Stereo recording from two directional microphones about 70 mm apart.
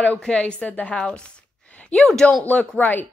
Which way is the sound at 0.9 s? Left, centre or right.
Centre.